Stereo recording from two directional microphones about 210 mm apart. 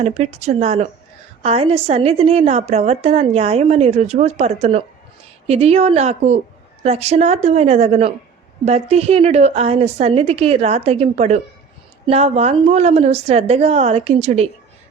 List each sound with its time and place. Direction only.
0.0 s a woman's voice: 30° right (ahead or behind)